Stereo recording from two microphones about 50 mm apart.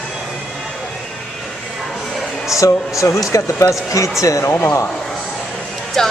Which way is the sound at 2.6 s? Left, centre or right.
Left.